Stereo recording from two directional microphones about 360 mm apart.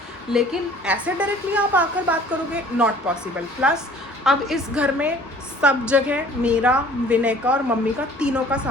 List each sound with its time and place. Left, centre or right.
0.3 s a woman's voice: centre